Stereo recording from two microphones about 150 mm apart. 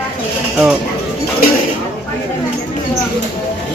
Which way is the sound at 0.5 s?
10° right (ahead or behind).